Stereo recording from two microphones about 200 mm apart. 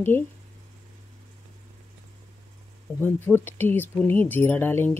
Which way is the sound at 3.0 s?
10° left (ahead or behind).